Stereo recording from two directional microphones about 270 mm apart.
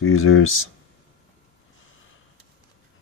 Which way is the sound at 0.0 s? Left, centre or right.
Left.